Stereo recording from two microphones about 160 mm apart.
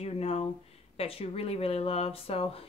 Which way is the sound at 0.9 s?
40° left (ahead or behind).